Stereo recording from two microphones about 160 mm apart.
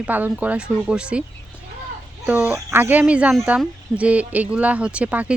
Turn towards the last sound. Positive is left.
turn(degrees=-10)  # may be behind; listen again after turning